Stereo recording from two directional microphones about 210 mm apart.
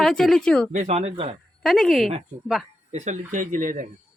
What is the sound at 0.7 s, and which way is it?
Speech, 35° right (ahead or behind).